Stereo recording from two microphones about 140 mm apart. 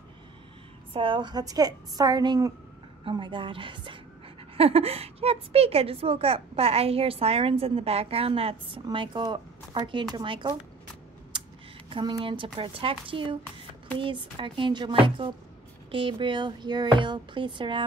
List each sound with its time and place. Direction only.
0.9 s a woman's voice: 35° right (ahead or behind)
11.3 s a sound: 35° right (ahead or behind)
11.9 s speech: 35° right (ahead or behind)